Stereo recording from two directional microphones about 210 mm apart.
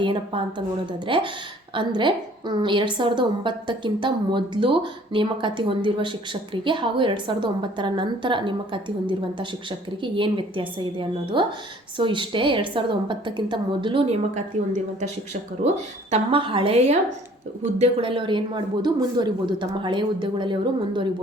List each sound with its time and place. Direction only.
0.0 s a woman's voice: 25° right (ahead or behind)
16.0 s a woman's voice: 30° right (ahead or behind)